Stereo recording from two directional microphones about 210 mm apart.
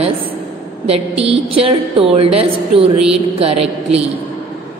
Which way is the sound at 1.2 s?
25° right (ahead or behind).